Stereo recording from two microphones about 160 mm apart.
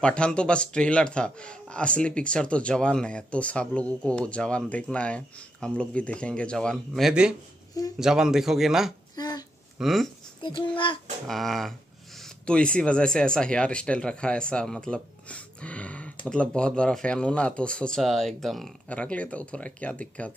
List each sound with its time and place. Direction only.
0.0 s a man's voice: 5° left (ahead or behind)
9.1 s a sound: 25° left (ahead or behind)
9.8 s speech: centre (ahead or behind)
10.4 s a child's voice: 30° left (ahead or behind)
11.2 s a man's voice: centre (ahead or behind)